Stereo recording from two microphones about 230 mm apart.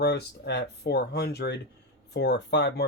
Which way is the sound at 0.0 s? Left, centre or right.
Left.